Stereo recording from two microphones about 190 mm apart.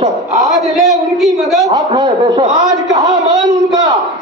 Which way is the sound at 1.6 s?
20° right (ahead or behind).